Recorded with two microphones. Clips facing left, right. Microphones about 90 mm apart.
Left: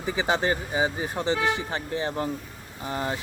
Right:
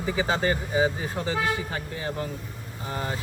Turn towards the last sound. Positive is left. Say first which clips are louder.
# left 2 dB
turn(degrees=20)  # may be behind; listen again after turning